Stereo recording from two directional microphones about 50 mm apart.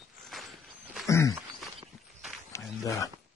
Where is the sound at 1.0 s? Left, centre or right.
Left.